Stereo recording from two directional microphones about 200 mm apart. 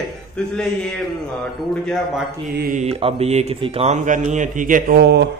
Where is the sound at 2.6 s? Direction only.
40° right (ahead or behind).